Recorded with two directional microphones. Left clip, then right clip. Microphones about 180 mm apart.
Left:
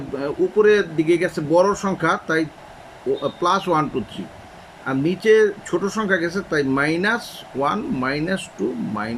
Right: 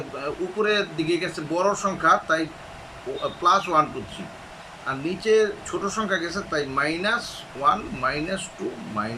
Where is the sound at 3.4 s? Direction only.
45° left (ahead or behind).